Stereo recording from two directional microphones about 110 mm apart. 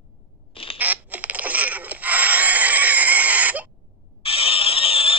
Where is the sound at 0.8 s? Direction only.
15° right (ahead or behind).